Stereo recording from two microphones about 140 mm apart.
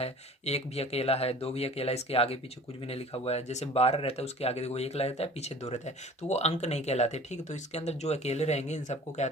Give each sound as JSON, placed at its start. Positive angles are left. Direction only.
{"t": 0.0, "sound": "speech", "side_deg": 50}